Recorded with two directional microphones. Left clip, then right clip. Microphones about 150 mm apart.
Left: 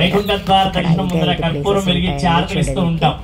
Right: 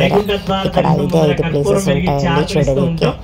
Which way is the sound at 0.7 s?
20° right (ahead or behind).